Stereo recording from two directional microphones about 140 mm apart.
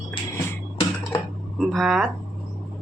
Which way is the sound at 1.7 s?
Centre (ahead or behind).